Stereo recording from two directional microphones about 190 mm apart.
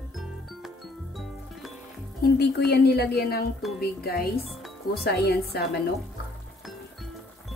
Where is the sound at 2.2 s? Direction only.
55° left (ahead or behind).